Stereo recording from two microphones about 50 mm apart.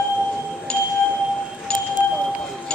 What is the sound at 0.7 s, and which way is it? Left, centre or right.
Music, centre.